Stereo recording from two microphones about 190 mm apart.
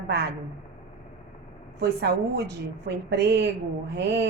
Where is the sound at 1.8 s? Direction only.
60° right (ahead or behind).